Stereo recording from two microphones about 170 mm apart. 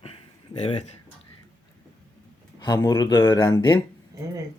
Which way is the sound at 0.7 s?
40° left (ahead or behind).